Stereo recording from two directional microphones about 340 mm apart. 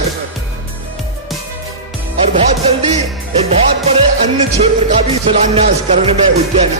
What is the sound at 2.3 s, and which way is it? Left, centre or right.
Music, centre.